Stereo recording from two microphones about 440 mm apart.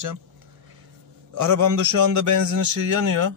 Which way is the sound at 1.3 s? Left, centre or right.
Right.